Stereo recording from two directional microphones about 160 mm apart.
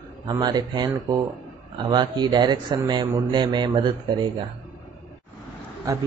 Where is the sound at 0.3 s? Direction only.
25° right (ahead or behind).